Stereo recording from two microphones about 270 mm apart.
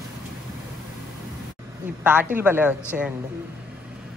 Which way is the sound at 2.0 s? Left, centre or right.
Centre.